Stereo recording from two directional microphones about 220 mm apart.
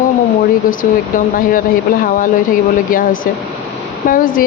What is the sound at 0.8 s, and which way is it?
Speech, 40° left (ahead or behind).